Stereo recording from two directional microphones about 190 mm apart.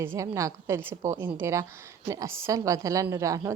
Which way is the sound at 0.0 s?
15° right (ahead or behind).